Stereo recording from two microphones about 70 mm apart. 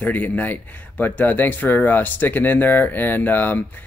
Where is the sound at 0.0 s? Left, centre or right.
Left.